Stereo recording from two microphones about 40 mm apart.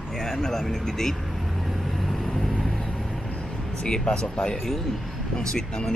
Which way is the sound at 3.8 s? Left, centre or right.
Left.